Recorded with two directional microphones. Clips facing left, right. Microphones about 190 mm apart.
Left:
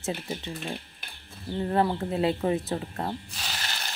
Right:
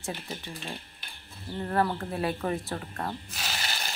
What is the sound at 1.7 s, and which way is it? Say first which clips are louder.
Speech: left 2 dB; 20° left (ahead or behind).